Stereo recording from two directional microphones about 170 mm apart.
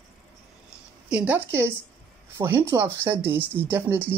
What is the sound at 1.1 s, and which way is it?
Speech, 10° right (ahead or behind).